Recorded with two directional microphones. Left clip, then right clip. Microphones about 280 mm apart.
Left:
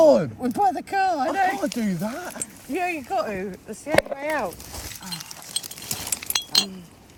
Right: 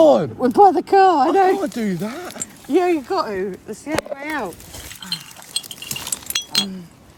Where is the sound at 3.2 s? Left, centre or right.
Centre.